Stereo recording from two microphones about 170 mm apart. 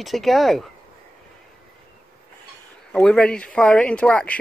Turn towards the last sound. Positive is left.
turn(degrees=5)  # may be behind; listen again after turning